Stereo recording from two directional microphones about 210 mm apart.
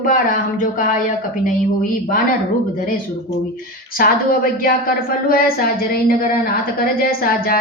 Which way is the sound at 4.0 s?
45° left (ahead or behind).